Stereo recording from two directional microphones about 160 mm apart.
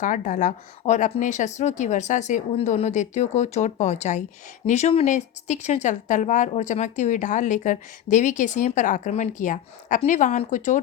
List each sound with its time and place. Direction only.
0.0 s speech: 50° left (ahead or behind)